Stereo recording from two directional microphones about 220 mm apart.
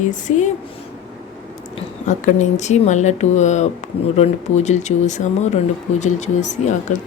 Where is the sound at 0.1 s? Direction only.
35° left (ahead or behind).